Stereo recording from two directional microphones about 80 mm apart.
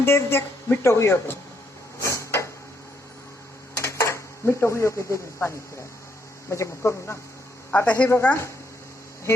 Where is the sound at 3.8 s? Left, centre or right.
Left.